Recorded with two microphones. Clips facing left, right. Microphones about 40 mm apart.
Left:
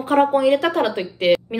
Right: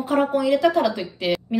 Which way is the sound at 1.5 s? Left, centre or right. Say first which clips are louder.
Right 2 dB; left.